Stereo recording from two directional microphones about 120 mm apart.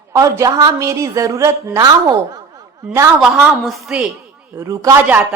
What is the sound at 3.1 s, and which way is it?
Speech, 10° right (ahead or behind).